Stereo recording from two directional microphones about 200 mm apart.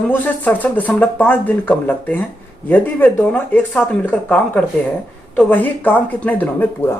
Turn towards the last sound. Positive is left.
turn(degrees=10)  # may be behind; listen again after turning